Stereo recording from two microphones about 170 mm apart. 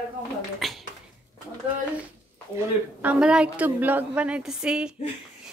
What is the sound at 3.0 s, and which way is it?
A woman's voice, 5° right (ahead or behind).